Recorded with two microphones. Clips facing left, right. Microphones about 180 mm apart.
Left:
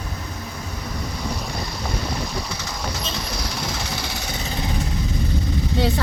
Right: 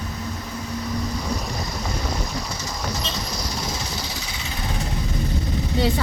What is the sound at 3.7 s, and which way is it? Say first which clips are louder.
Jackhammer: left 1 dB; 60° left (ahead or behind).